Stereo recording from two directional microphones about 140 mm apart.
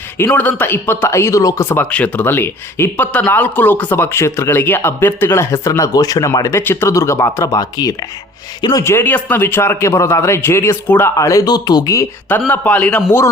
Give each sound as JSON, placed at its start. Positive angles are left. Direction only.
{"t": 0.3, "sound": "a man's voice", "side_deg": 10}
{"t": 12.5, "sound": "speech", "side_deg": 10}